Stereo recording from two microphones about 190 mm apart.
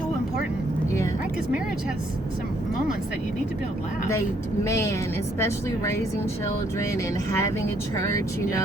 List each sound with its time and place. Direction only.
4.6 s speech: 15° left (ahead or behind)